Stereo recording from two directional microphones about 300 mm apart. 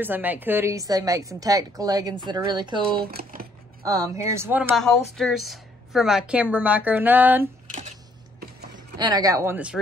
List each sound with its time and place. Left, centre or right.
0.0 s a woman's voice: centre
3.0 s speech: right
3.8 s a woman's voice: centre
8.7 s a woman's voice: centre